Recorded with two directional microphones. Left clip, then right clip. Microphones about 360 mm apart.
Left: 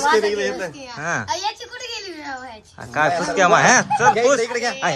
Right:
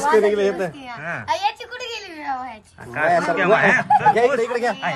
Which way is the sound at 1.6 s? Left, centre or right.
Right.